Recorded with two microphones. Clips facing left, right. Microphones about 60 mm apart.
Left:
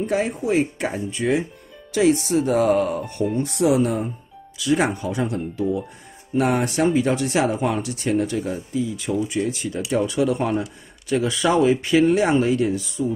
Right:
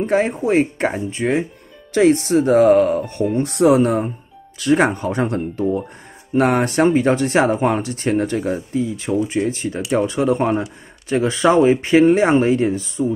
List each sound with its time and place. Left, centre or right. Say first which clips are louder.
0.0 s speech: right 5 dB; right